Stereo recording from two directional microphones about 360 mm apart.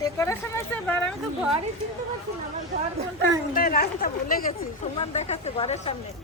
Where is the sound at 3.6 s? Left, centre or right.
Left.